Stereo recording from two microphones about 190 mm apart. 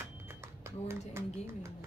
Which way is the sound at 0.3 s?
15° right (ahead or behind).